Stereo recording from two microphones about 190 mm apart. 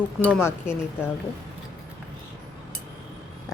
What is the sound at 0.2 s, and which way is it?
Speech, 10° right (ahead or behind).